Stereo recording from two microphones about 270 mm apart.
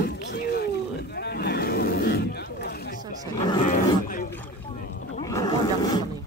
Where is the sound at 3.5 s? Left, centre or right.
Centre.